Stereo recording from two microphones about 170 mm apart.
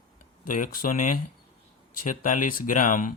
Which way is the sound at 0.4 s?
50° left (ahead or behind).